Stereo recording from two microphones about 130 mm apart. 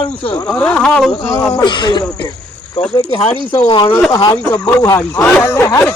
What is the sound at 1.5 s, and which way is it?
Speech, 35° left (ahead or behind).